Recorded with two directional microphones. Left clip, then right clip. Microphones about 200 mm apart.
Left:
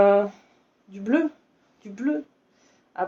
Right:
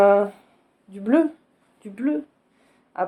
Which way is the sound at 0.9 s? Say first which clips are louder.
Right 4 dB; 35° right (ahead or behind).